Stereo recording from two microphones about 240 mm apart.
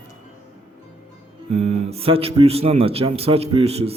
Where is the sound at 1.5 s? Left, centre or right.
Right.